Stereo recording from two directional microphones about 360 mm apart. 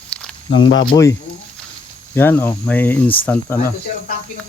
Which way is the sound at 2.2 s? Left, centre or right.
Centre.